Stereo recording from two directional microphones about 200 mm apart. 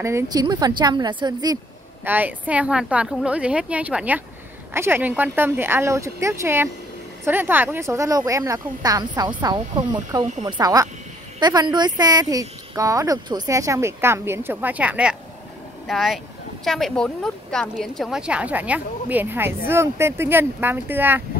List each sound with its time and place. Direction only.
0.0 s a woman's voice: 15° right (ahead or behind)
2.0 s a woman's voice: 10° right (ahead or behind)